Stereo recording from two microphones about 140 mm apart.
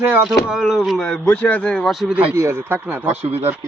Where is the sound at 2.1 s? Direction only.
15° right (ahead or behind).